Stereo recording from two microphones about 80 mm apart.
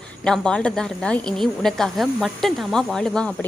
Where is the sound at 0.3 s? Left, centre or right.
Centre.